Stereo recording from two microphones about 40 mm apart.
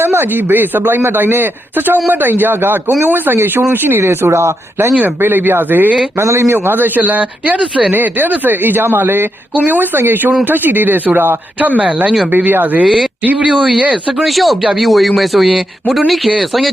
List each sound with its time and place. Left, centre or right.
0.0 s speech: right
5.2 s speech: right
6.1 s a man's voice: right
7.9 s speech: right
9.6 s a man's voice: right
12.5 s speech: right
14.2 s speech: centre